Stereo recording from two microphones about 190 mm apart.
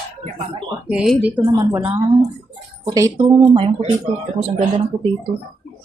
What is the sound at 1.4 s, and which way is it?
Speech, 20° right (ahead or behind).